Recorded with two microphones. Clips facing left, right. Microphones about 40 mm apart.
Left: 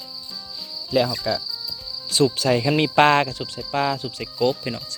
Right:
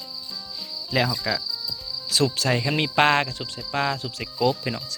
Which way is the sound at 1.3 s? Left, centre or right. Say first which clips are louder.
Left 2 dB; right.